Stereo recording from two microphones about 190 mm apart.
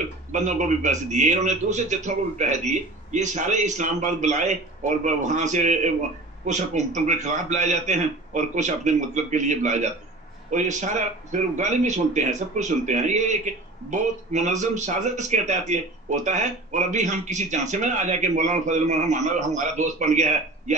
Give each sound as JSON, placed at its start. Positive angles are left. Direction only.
{"t": 0.3, "sound": "a man's voice", "side_deg": -40}